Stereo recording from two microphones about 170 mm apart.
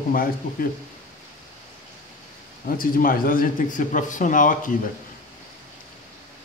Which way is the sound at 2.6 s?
55° left (ahead or behind).